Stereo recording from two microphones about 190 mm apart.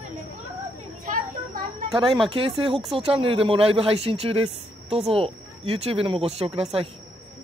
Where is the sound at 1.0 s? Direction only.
45° right (ahead or behind).